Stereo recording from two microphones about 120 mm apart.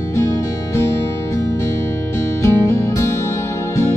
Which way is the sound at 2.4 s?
25° left (ahead or behind).